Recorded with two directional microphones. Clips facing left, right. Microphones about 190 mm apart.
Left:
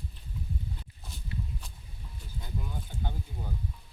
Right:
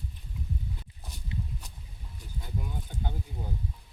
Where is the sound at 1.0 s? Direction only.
15° right (ahead or behind).